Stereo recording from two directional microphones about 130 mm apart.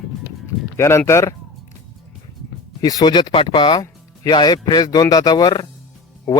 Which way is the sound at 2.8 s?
35° left (ahead or behind).